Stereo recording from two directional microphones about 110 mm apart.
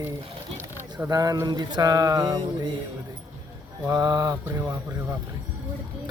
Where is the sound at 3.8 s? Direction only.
35° right (ahead or behind).